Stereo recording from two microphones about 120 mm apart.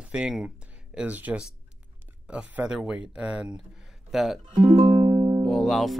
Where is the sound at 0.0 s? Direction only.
10° right (ahead or behind).